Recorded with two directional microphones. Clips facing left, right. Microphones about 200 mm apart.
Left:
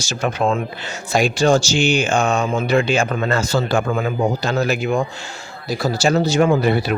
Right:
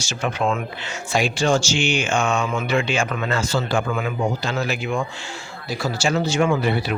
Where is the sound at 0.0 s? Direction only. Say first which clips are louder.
Left 3 dB; 40° left (ahead or behind).